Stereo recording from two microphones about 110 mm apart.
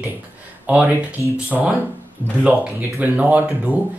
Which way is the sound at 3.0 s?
15° right (ahead or behind).